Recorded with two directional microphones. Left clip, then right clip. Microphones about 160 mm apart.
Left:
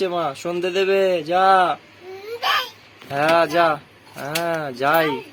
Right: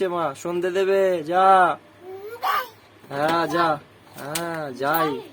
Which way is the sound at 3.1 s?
15° left (ahead or behind).